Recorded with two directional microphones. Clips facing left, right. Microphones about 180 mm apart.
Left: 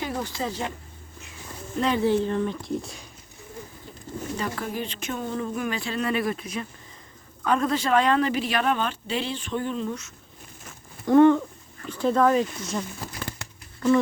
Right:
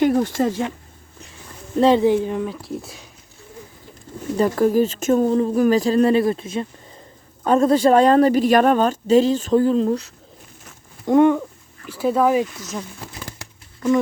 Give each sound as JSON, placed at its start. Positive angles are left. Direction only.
{"t": 0.0, "sound": "speech", "side_deg": -50}
{"t": 1.8, "sound": "speech", "side_deg": -25}
{"t": 2.0, "sound": "speech", "side_deg": -10}
{"t": 4.4, "sound": "speech", "side_deg": -40}
{"t": 11.0, "sound": "speech", "side_deg": -15}